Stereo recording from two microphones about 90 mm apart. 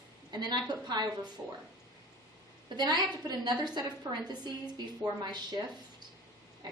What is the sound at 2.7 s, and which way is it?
A woman's voice, 50° right (ahead or behind).